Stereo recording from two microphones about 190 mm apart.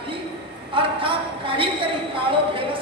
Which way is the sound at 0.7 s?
25° right (ahead or behind).